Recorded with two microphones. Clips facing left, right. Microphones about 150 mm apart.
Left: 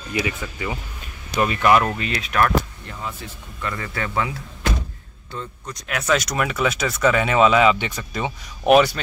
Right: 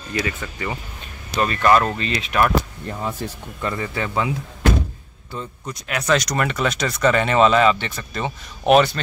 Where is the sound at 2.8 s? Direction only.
40° right (ahead or behind).